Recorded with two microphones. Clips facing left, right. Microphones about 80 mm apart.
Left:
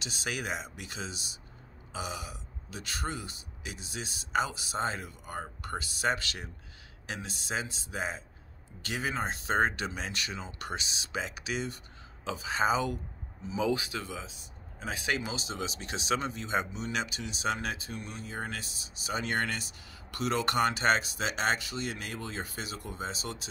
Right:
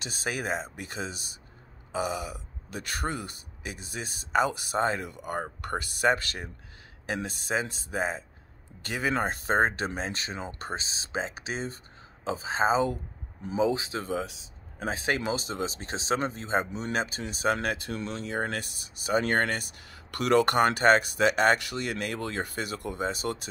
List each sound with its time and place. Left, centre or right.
0.0 s speech: right
14.2 s speech: right
14.9 s speech: right
17.9 s speech: right